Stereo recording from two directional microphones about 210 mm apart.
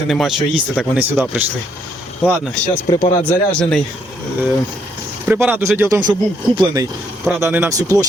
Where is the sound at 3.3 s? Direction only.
5° left (ahead or behind).